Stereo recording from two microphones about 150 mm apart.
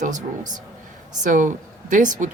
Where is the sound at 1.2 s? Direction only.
60° right (ahead or behind).